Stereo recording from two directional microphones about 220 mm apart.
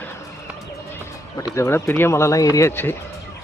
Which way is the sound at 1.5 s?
10° left (ahead or behind).